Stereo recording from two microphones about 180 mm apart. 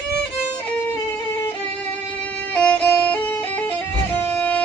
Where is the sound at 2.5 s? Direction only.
10° left (ahead or behind).